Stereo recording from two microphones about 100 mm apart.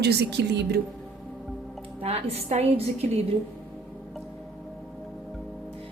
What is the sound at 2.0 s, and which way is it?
A woman's voice, 80° right.